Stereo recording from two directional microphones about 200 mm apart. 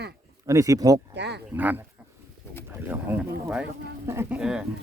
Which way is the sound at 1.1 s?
60° right (ahead or behind).